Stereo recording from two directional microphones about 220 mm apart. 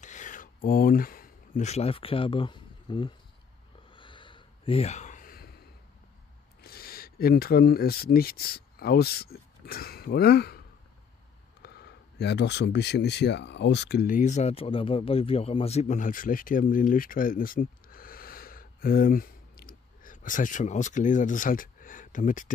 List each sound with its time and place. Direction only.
0.0 s a sound: 35° left (ahead or behind)
6.6 s speech: 45° left (ahead or behind)
11.6 s speech: 50° left (ahead or behind)